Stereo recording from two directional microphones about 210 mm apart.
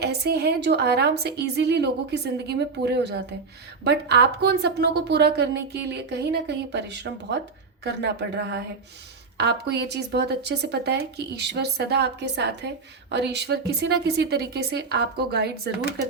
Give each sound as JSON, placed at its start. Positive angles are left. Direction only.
{"t": 0.0, "sound": "speech", "side_deg": -50}